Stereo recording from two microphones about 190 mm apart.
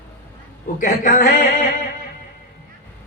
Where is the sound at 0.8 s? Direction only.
45° left (ahead or behind).